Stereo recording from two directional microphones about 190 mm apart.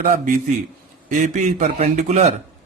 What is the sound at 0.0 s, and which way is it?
A man's voice, 45° right (ahead or behind).